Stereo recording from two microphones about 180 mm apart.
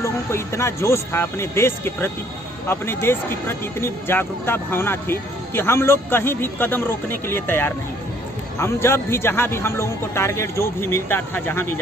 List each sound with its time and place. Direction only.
0.0 s speech: 15° left (ahead or behind)